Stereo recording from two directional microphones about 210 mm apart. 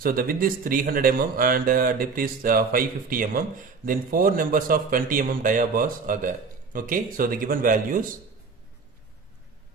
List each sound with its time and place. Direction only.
0.0 s speech: 45° right (ahead or behind)